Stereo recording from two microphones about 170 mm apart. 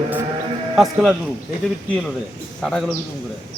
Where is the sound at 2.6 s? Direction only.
5° left (ahead or behind).